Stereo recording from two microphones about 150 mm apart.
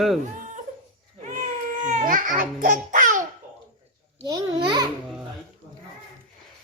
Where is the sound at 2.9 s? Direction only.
60° right (ahead or behind).